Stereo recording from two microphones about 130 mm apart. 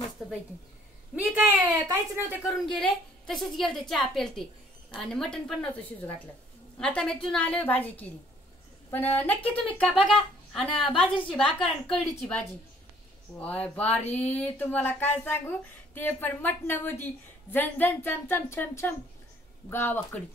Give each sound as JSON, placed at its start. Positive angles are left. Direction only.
{"t": 0.2, "sound": "a sound", "side_deg": 0}
{"t": 1.1, "sound": "speech", "side_deg": -10}
{"t": 1.7, "sound": "speech", "side_deg": -25}
{"t": 2.8, "sound": "a woman's voice", "side_deg": 0}
{"t": 6.8, "sound": "a woman's voice", "side_deg": 5}